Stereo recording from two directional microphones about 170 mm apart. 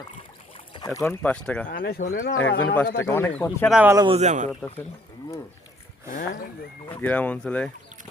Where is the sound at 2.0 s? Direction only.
50° left (ahead or behind).